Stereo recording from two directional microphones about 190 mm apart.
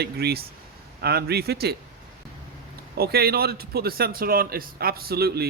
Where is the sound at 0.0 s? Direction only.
55° right (ahead or behind).